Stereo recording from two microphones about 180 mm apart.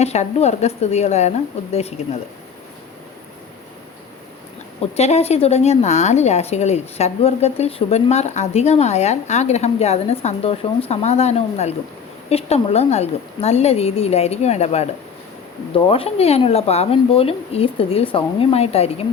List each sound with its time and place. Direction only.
0.0 s a woman's voice: 35° left (ahead or behind)
4.8 s a woman's voice: 35° left (ahead or behind)